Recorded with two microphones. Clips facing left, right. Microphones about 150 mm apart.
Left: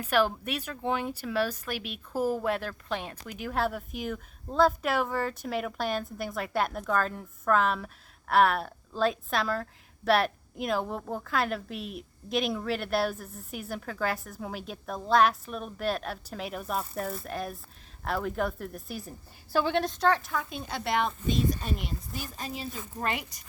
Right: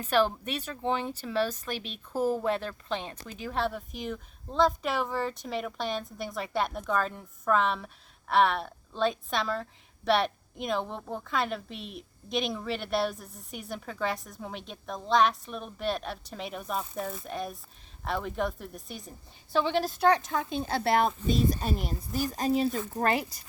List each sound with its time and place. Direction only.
0.0 s a woman's voice: 10° left (ahead or behind)
20.0 s a woman's voice: 15° right (ahead or behind); by 23.4 s 35° right (ahead or behind)